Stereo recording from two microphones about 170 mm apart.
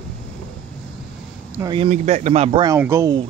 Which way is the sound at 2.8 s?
15° right (ahead or behind).